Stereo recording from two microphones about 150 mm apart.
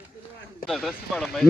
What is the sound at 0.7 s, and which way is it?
Speech, centre (ahead or behind).